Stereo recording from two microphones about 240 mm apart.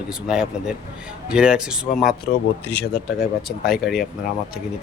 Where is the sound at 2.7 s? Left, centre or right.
Left.